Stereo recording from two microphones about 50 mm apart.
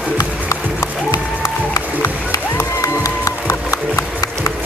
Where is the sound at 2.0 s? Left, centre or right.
Left.